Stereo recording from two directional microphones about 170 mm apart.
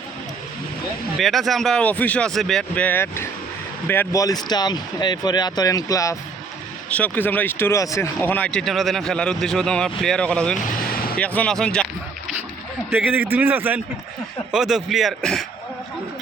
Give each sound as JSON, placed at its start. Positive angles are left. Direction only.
{"t": 1.2, "sound": "speech", "side_deg": 0}
{"t": 12.9, "sound": "a man's voice", "side_deg": -10}